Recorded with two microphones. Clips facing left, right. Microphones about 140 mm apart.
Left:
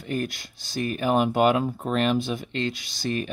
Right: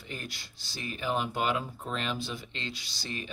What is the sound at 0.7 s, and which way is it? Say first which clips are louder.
Speech: left 9 dB; 55° left (ahead or behind).